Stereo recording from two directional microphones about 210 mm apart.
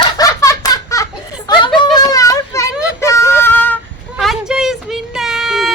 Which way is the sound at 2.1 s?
15° left (ahead or behind).